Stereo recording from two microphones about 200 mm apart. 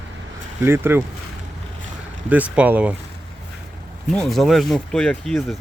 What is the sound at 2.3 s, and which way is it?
Speech, 5° right (ahead or behind).